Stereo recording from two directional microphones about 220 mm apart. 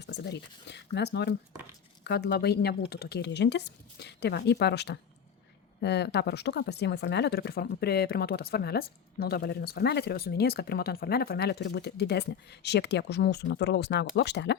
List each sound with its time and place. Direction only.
0.0 s speech: 50° left (ahead or behind)